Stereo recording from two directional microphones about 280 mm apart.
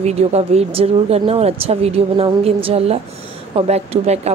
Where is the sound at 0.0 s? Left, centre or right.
Right.